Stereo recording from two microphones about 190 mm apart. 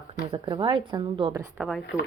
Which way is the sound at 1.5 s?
Centre (ahead or behind).